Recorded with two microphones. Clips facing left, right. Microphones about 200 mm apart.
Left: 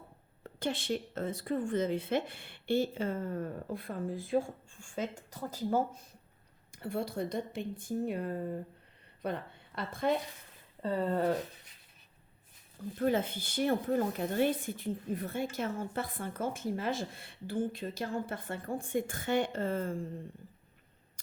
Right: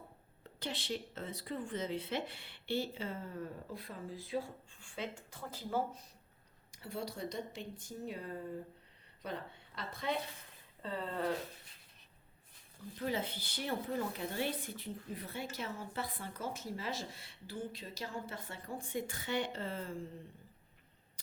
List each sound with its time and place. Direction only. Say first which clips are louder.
0.4 s a woman's voice: left 7 dB; 50° left (ahead or behind)
13.0 s speech: left 7 dB; 50° left (ahead or behind)